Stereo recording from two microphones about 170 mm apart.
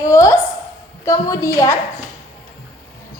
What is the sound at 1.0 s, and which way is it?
Speech, 20° left (ahead or behind).